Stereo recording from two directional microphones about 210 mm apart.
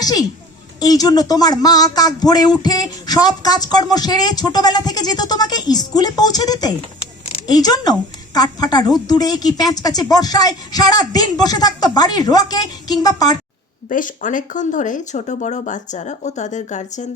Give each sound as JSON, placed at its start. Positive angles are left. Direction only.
{"t": 0.0, "sound": "a woman's voice", "side_deg": 15}
{"t": 13.9, "sound": "speech", "side_deg": 40}